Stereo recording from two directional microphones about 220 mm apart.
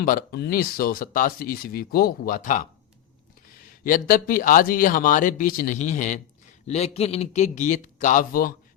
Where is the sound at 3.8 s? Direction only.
40° left (ahead or behind).